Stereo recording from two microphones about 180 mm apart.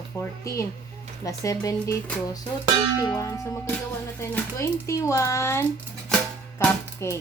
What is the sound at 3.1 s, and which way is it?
Speech, 15° left (ahead or behind).